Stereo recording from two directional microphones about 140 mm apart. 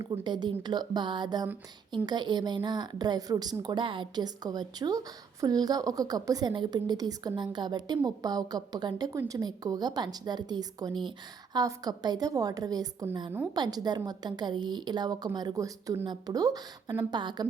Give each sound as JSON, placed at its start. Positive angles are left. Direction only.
{"t": 0.0, "sound": "a woman's voice", "side_deg": -30}